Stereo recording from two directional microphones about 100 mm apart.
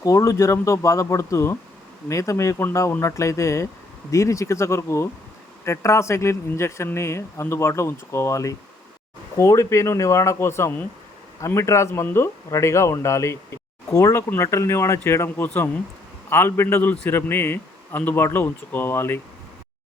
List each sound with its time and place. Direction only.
0.0 s speech: 30° left (ahead or behind)